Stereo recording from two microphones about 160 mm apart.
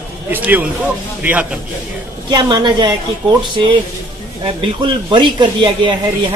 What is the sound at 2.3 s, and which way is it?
Speech, 25° right (ahead or behind).